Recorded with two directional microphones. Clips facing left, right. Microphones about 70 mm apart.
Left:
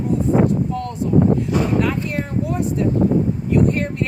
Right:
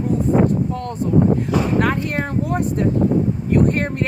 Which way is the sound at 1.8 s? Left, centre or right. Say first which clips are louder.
Right 2 dB; right.